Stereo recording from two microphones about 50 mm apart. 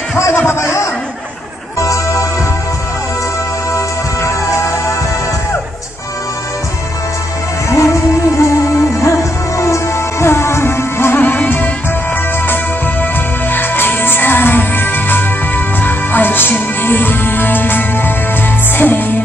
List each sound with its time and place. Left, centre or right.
0.5 s a sound: left
1.8 s music: left
3.7 s music: left
7.7 s music: left
11.1 s music: left
13.0 s music: left